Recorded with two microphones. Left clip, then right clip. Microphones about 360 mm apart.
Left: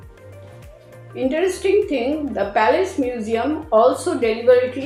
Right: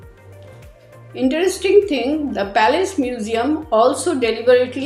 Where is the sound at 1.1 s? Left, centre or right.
Right.